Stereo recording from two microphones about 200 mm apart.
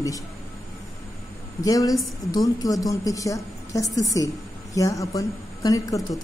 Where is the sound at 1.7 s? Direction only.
15° left (ahead or behind).